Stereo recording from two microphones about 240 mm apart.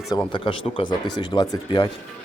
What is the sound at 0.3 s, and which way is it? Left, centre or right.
Speech, left.